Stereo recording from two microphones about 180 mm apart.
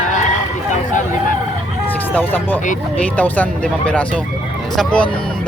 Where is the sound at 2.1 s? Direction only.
10° left (ahead or behind).